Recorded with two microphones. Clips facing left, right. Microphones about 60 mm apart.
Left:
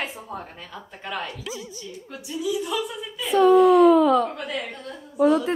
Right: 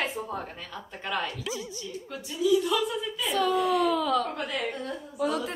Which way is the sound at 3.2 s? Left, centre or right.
Left.